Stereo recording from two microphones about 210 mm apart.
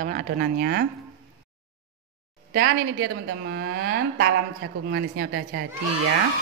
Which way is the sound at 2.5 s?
45° right (ahead or behind).